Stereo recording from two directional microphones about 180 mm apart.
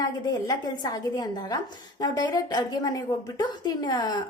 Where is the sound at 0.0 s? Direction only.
20° left (ahead or behind).